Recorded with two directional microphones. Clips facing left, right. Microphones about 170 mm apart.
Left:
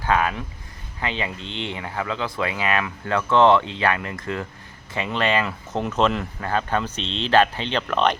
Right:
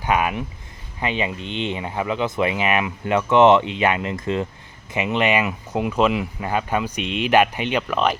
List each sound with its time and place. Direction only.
0.0 s speech: 15° right (ahead or behind)